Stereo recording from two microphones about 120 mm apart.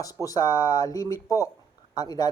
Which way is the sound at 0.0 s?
30° left (ahead or behind).